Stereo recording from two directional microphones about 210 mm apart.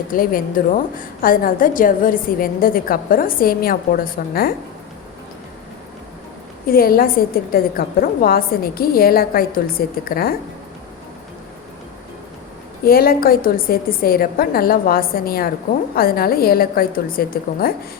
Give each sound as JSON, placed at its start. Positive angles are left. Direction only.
{"t": 0.1, "sound": "a woman's voice", "side_deg": 40}
{"t": 6.7, "sound": "a woman's voice", "side_deg": 45}
{"t": 12.8, "sound": "a woman's voice", "side_deg": 45}